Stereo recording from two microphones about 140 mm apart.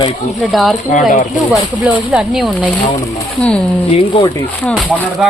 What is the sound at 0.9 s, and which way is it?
Speech, 65° left (ahead or behind).